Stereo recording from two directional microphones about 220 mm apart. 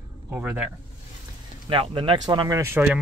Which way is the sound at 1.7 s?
25° right (ahead or behind).